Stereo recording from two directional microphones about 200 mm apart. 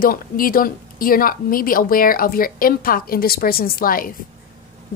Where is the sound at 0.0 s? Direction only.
45° left (ahead or behind).